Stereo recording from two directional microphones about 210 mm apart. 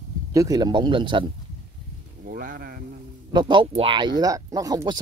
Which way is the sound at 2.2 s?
45° right (ahead or behind).